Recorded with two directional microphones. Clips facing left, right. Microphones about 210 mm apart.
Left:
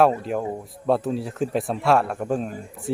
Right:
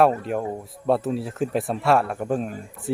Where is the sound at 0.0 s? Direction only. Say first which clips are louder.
Even; centre (ahead or behind).